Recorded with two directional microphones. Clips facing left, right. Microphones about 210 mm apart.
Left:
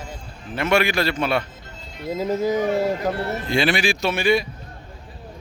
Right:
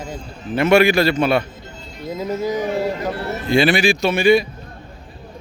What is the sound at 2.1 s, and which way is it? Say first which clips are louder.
Speech: left 1 dB; 25° left (ahead or behind).